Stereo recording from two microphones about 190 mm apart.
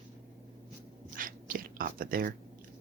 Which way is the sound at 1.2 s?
45° right (ahead or behind).